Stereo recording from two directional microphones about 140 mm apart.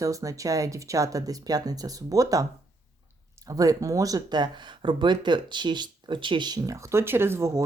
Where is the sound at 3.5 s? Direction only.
25° right (ahead or behind).